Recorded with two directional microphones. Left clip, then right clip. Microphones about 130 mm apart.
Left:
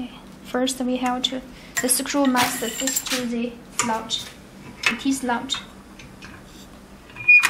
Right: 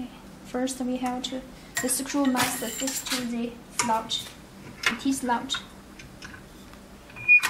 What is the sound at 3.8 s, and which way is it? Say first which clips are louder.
A woman's voice: left 1 dB; 5° left (ahead or behind).